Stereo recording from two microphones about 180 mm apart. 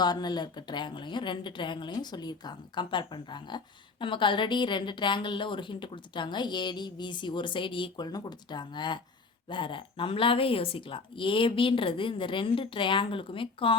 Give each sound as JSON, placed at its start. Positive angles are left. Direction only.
{"t": 0.0, "sound": "a woman's voice", "side_deg": 25}